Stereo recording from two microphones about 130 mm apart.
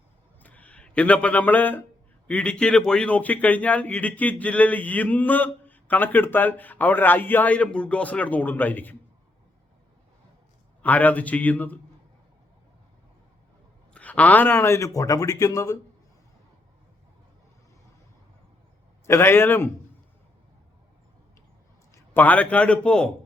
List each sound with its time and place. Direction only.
0.3 s a sound: 10° left (ahead or behind)
2.2 s speech: 10° left (ahead or behind)
10.8 s speech: 10° left (ahead or behind)
13.9 s a man's voice: 10° left (ahead or behind)
19.0 s a man's voice: 20° left (ahead or behind)
21.9 s a man's voice: 15° left (ahead or behind)